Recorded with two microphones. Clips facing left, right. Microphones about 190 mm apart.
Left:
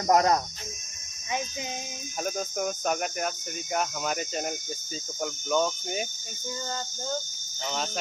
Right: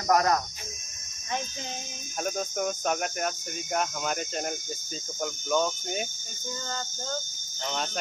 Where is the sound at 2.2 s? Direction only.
Centre (ahead or behind).